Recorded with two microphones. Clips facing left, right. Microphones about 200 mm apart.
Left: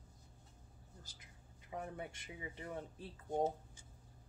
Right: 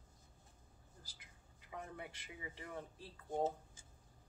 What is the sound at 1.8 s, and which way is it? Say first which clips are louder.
Speech: left 3 dB; 30° left (ahead or behind).